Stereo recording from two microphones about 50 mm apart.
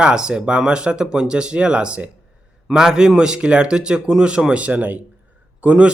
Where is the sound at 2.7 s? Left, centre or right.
Centre.